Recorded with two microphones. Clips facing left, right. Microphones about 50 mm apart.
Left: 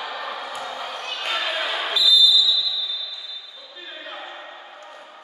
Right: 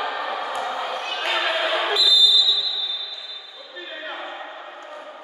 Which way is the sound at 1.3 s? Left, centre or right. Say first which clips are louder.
Right 3 dB; centre.